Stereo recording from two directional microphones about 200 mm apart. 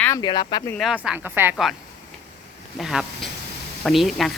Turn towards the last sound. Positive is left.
turn(degrees=0)  # may be behind; listen again after turning